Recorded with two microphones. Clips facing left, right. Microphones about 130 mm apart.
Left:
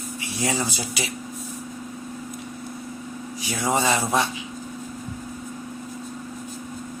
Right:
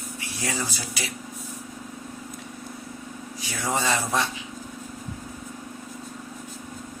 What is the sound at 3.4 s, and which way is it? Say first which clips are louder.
Speech: left 4 dB; 15° left (ahead or behind).